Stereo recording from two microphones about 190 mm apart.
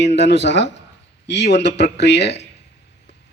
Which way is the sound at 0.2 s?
65° left (ahead or behind).